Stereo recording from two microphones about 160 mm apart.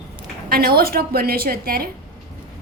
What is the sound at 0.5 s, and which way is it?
A woman's voice, 70° right (ahead or behind).